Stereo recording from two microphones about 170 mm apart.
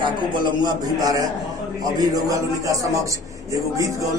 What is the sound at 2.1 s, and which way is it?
A man's voice, 20° right (ahead or behind).